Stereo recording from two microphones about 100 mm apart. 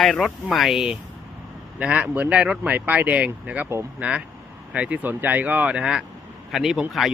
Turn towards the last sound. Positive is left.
turn(degrees=-5)  # may be behind; listen again after turning